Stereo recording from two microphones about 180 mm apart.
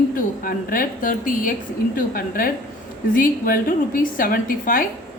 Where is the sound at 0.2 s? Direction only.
50° left (ahead or behind).